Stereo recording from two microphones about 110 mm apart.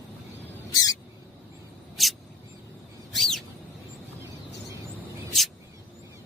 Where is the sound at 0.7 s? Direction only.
35° left (ahead or behind).